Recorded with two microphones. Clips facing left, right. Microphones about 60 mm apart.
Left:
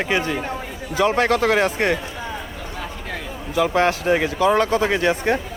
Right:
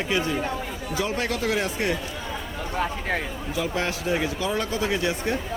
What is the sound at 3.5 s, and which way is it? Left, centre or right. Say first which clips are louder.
Speech: left 9 dB; left.